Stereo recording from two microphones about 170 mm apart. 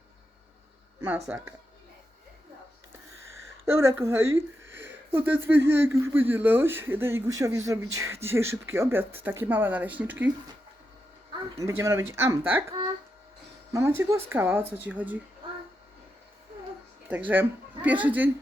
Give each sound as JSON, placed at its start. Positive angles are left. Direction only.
{"t": 1.3, "sound": "speech", "side_deg": -10}
{"t": 3.3, "sound": "speech", "side_deg": -15}
{"t": 11.5, "sound": "speech", "side_deg": -15}
{"t": 13.7, "sound": "speech", "side_deg": -15}
{"t": 17.1, "sound": "speech", "side_deg": -10}